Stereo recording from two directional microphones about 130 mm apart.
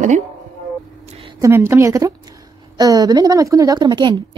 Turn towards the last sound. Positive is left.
turn(degrees=-35)  # may be behind; listen again after turning